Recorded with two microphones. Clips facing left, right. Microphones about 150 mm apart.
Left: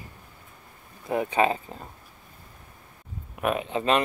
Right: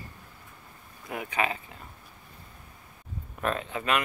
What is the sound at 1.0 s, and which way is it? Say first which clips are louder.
Speech: left 7 dB; 30° left (ahead or behind).